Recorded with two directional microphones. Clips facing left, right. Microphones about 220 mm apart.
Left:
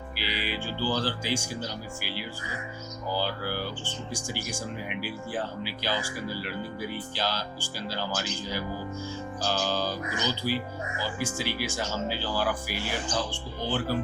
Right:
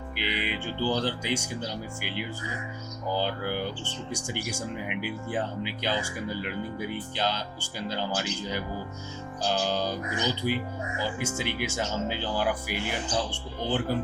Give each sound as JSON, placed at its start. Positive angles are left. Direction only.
{"t": 0.2, "sound": "speech", "side_deg": -20}
{"t": 3.1, "sound": "speech", "side_deg": -20}